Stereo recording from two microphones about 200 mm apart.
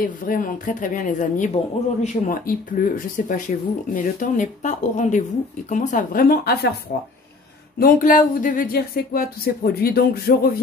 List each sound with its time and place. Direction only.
0.0 s speech: 45° left (ahead or behind)